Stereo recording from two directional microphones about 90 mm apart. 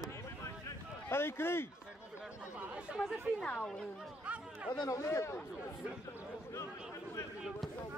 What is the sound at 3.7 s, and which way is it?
Speech, 5° left (ahead or behind).